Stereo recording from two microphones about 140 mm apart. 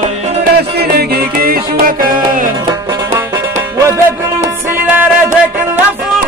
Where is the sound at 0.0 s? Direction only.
60° right (ahead or behind).